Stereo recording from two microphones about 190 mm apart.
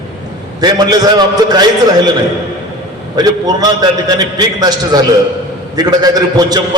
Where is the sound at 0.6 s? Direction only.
20° right (ahead or behind).